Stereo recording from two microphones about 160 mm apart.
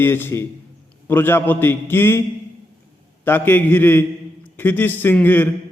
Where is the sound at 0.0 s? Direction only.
15° left (ahead or behind).